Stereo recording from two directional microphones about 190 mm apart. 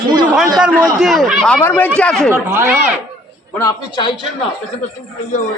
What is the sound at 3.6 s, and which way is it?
Speech, 20° left (ahead or behind).